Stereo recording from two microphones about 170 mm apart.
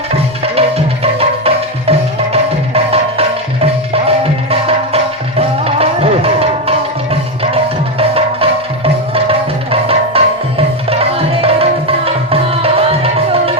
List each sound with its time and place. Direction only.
0.1 s music: 35° right (ahead or behind)
10.8 s tabla: 35° right (ahead or behind)